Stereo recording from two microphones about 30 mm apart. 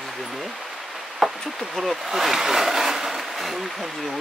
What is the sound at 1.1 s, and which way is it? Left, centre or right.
Speech, centre.